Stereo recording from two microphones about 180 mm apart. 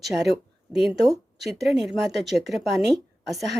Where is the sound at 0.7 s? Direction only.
5° right (ahead or behind).